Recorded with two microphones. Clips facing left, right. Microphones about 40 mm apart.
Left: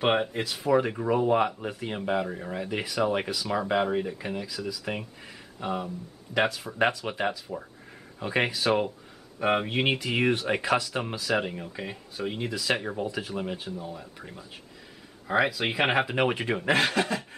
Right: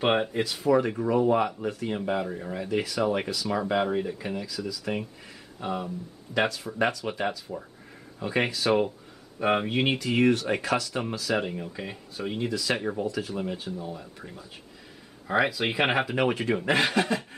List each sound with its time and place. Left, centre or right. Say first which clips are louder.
0.0 s speech: right 1 dB; centre
8.6 s speech: right 1 dB; centre
12.4 s speech: right 1 dB; centre
16.1 s speech: right 1 dB; centre
16.6 s speech: left 1 dB; centre